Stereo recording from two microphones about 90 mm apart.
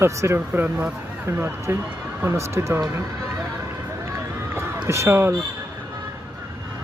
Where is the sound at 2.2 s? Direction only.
30° right (ahead or behind).